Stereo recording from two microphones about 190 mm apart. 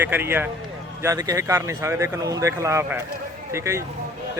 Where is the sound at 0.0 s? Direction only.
10° right (ahead or behind).